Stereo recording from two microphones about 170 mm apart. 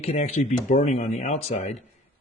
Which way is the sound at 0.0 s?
40° left (ahead or behind).